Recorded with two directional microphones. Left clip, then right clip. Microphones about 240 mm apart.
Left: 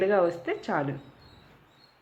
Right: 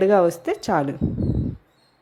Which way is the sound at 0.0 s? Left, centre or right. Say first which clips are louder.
Right 7 dB; right.